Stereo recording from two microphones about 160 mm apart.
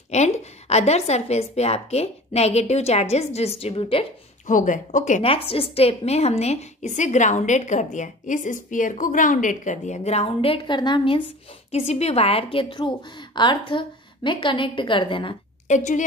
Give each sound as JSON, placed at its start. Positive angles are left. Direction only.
{"t": 0.1, "sound": "a woman's voice", "side_deg": 45}
{"t": 4.5, "sound": "a woman's voice", "side_deg": 55}
{"t": 5.2, "sound": "a woman's voice", "side_deg": 35}
{"t": 11.7, "sound": "a woman's voice", "side_deg": 40}
{"t": 15.7, "sound": "a woman's voice", "side_deg": 50}